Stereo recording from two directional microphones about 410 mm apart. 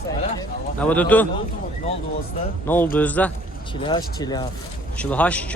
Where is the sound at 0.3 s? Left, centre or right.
Centre.